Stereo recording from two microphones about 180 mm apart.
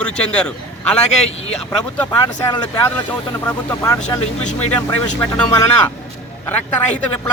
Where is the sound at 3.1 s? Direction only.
10° left (ahead or behind).